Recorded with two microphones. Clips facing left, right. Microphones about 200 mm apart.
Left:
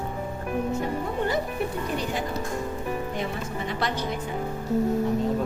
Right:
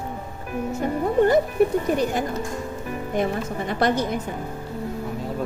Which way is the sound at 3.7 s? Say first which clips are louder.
Right 8 dB; 50° right (ahead or behind).